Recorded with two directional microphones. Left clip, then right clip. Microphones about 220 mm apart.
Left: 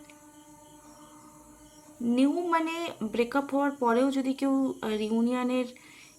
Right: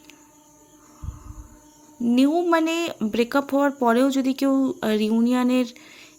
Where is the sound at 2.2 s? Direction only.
30° right (ahead or behind).